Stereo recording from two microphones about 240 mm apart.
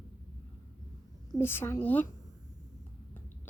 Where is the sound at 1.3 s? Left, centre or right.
Centre.